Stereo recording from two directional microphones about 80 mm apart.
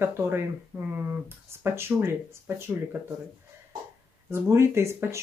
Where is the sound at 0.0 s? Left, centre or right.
Right.